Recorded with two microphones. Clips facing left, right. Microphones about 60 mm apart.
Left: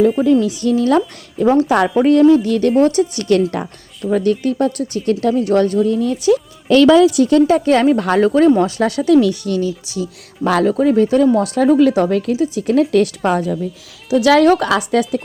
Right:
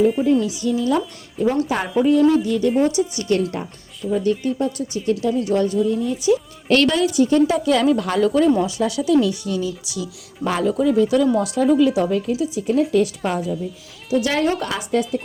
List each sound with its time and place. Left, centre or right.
0.2 s speech: left
3.2 s a woman's voice: left
4.1 s speech: left
7.4 s speech: left
9.8 s speech: left
10.4 s speech: left
14.1 s speech: left